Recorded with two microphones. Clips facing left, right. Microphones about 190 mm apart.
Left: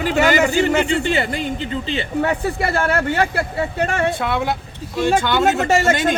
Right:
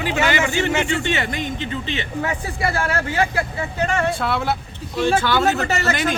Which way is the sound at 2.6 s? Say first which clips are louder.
Left 3 dB; 55° left (ahead or behind).